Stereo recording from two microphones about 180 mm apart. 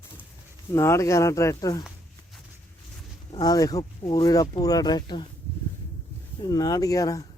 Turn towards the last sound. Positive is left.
turn(degrees=20)  # may be behind; listen again after turning